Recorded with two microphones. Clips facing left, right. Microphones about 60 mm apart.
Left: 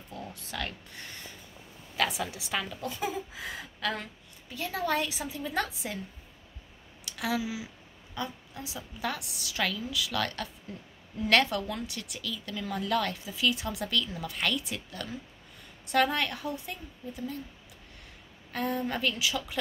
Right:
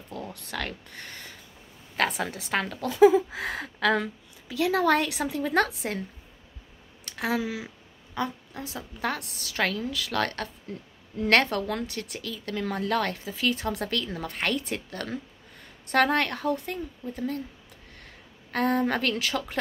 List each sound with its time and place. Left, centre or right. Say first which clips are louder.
0.3 s a woman's voice: right 2 dB; right
4.5 s a woman's voice: right 8 dB; right
7.1 s a woman's voice: right 3 dB; right
18.5 s a woman's voice: right 6 dB; right